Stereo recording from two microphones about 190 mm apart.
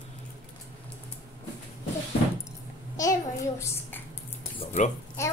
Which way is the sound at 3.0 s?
15° left (ahead or behind).